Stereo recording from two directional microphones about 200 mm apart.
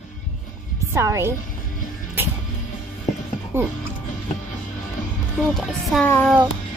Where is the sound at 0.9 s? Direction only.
15° right (ahead or behind).